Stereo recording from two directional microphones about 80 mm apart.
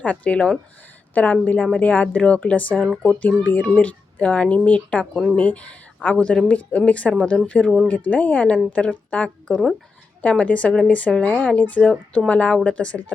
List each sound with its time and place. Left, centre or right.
0.0 s speech: centre